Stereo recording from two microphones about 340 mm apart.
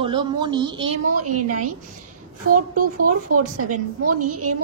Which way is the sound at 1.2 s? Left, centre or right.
Right.